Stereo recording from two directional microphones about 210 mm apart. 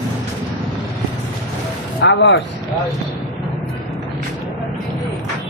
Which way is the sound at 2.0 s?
55° left (ahead or behind).